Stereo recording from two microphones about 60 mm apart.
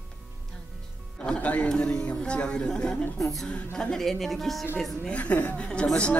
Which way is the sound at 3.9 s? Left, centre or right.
Centre.